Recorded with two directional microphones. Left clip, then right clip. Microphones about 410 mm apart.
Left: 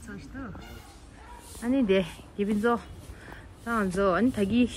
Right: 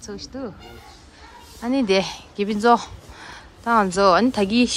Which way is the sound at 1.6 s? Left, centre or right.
Centre.